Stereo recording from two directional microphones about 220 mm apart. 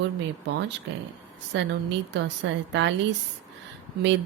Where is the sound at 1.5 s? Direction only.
55° right (ahead or behind).